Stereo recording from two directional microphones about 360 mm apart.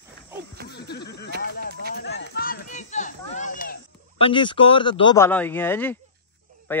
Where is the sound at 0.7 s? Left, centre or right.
Left; by 5.9 s centre.